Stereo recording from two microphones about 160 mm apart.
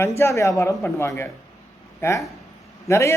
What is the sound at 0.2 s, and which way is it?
A man's voice, 20° left (ahead or behind).